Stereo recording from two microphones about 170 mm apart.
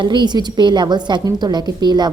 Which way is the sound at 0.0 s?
25° right (ahead or behind).